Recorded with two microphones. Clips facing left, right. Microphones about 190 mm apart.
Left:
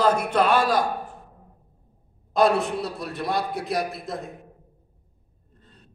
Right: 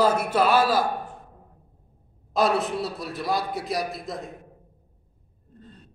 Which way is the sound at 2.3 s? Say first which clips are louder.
Left 2 dB; centre (ahead or behind).